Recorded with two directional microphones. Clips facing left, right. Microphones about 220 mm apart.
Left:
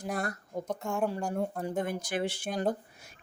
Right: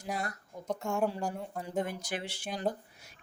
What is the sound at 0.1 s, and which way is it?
Speech, 50° left (ahead or behind).